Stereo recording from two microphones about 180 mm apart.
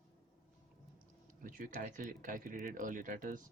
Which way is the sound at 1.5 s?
45° right (ahead or behind).